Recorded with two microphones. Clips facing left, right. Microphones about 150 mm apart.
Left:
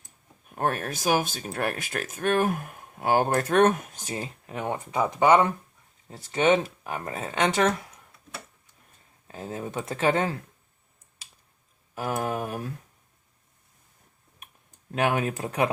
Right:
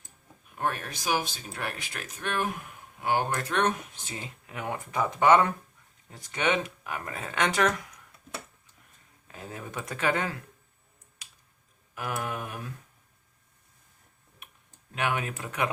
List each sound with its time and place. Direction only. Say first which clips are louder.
0.4 s speech: left 4 dB; 45° left (ahead or behind); by 7.9 s 25° left (ahead or behind)
9.2 s speech: left 6 dB; 30° left (ahead or behind)
11.9 s mantra: left 5 dB; 30° left (ahead or behind)
14.9 s mantra: left 5 dB; 40° left (ahead or behind)